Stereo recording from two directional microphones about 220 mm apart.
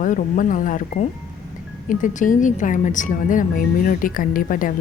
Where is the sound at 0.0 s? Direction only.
35° left (ahead or behind).